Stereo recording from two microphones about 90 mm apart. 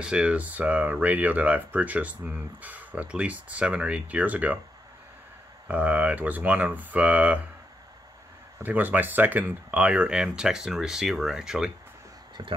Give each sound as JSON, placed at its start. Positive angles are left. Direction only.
{"t": 0.0, "sound": "speech", "side_deg": -10}
{"t": 5.7, "sound": "speech", "side_deg": -15}
{"t": 8.6, "sound": "speech", "side_deg": -20}
{"t": 12.4, "sound": "speech", "side_deg": -55}